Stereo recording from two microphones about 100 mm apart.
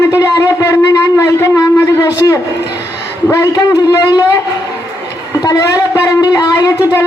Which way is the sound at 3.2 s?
30° left (ahead or behind).